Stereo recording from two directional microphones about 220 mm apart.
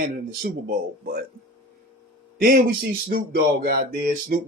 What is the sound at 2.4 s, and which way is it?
Speech, 45° right (ahead or behind).